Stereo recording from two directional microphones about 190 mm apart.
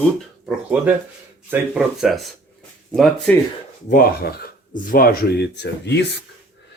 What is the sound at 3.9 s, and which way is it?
Speech, 50° left (ahead or behind).